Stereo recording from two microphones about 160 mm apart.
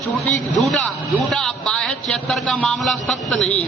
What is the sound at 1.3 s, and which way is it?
A man's voice, 5° left (ahead or behind).